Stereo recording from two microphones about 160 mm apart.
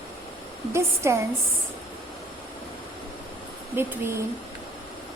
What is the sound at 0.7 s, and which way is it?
Speech, 15° right (ahead or behind).